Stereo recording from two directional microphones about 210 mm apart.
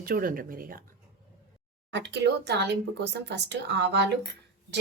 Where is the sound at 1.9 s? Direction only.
55° right (ahead or behind).